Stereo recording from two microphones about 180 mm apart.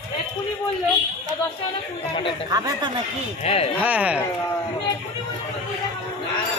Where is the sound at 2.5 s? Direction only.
20° right (ahead or behind).